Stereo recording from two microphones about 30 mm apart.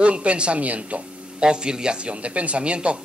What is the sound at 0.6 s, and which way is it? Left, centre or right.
Speech, right.